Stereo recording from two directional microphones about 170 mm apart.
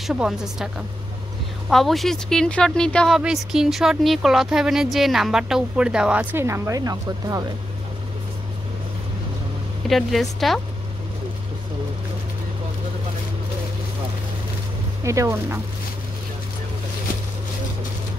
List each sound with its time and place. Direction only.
0.0 s speech: 5° right (ahead or behind)
1.7 s speech: centre (ahead or behind); by 7.4 s 20° right (ahead or behind)
9.8 s speech: centre (ahead or behind)
15.0 s speech: 20° right (ahead or behind)